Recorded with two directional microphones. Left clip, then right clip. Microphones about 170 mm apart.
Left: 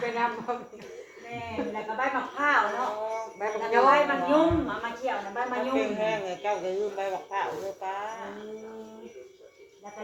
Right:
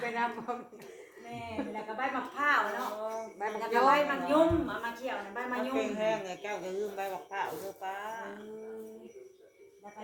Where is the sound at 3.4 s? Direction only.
40° right (ahead or behind).